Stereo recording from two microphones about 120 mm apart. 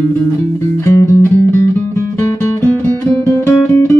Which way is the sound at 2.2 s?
20° left (ahead or behind).